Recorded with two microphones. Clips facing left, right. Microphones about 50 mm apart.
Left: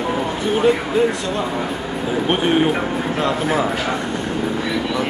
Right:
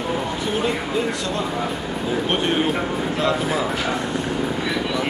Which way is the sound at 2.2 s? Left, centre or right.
Centre.